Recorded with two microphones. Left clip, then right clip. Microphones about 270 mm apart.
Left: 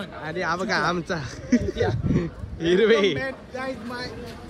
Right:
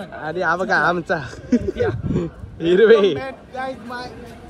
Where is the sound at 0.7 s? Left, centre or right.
Centre.